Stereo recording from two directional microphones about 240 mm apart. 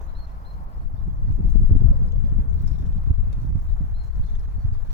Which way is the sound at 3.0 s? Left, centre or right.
Left.